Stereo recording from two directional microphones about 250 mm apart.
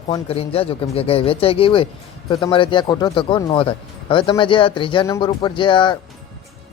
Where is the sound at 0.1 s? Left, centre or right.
Left.